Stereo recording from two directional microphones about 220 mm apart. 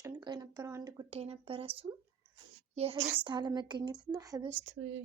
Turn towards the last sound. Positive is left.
turn(degrees=-55)  # may be behind; listen again after turning